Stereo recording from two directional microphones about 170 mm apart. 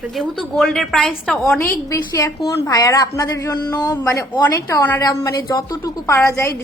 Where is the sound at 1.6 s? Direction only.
15° left (ahead or behind).